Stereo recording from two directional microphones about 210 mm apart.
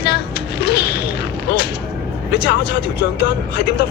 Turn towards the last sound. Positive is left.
turn(degrees=50)  # may be behind; listen again after turning